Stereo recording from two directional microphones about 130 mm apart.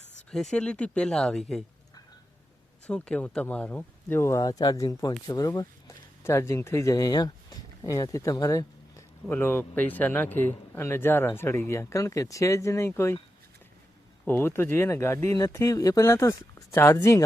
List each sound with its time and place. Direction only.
0.3 s speech: 5° left (ahead or behind)
2.8 s speech: 5° left (ahead or behind)
14.3 s speech: 15° left (ahead or behind)